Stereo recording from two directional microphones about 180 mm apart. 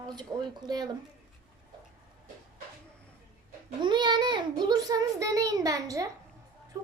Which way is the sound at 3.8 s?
25° right (ahead or behind).